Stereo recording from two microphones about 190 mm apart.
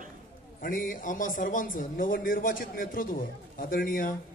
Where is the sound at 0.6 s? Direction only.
45° left (ahead or behind).